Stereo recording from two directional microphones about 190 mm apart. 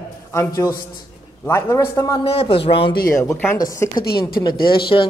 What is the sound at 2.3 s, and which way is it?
Speech, 30° left (ahead or behind).